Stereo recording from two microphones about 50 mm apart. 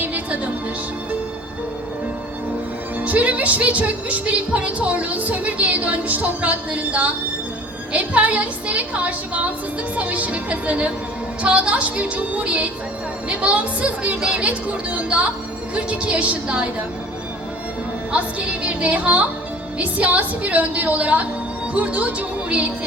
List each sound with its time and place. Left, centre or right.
0.0 s music: right
3.0 s speech: right
18.1 s speech: right